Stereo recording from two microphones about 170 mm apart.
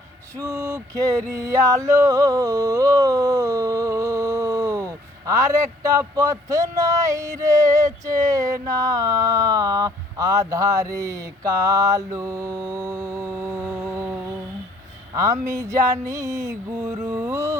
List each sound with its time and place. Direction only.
0.3 s male singing: 15° right (ahead or behind)
15.1 s speech: 20° right (ahead or behind)
17.1 s music: 15° right (ahead or behind)